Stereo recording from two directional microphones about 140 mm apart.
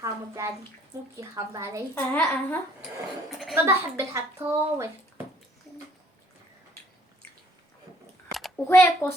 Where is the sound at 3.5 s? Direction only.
20° right (ahead or behind).